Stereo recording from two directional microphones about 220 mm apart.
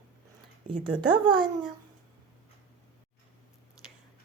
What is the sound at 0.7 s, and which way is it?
Speech, 20° right (ahead or behind).